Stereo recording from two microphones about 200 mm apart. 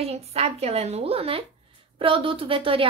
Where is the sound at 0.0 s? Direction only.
30° right (ahead or behind).